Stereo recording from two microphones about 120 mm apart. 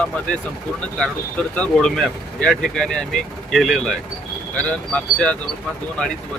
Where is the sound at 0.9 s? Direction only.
5° left (ahead or behind).